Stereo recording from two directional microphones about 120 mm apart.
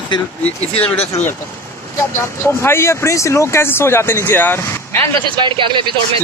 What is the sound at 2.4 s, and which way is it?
Speech, 20° left (ahead or behind).